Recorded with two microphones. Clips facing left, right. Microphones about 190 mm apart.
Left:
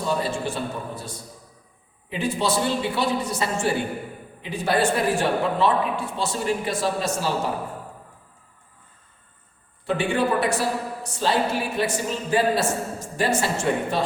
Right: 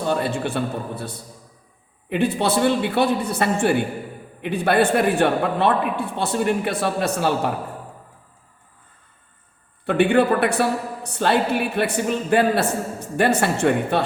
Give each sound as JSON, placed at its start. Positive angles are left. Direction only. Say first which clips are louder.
{"t": 0.0, "sound": "a man's voice", "louder": "right 3 dB", "side_deg": -60}
{"t": 9.8, "sound": "a man's voice", "louder": "right 6 dB", "side_deg": -60}